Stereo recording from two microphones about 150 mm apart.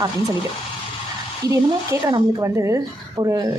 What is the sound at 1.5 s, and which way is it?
Speech, 20° right (ahead or behind).